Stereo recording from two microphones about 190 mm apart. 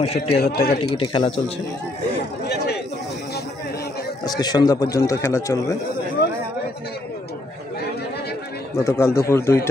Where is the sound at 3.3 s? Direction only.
55° left (ahead or behind).